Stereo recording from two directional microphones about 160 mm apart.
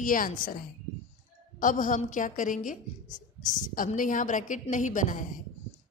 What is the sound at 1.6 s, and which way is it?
A woman's voice, 55° left (ahead or behind).